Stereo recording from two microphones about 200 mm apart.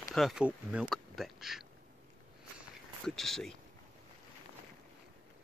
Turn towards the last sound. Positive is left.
turn(degrees=0)  # may be behind; listen again after turning